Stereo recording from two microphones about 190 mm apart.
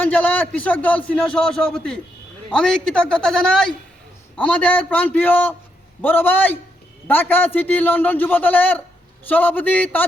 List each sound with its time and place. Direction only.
0.0 s a man's voice: 10° left (ahead or behind)